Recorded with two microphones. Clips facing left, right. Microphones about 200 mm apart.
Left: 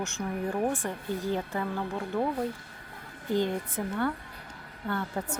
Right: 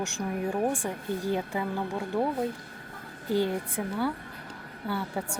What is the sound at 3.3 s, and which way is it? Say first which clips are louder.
Speech: right 1 dB; 10° right (ahead or behind).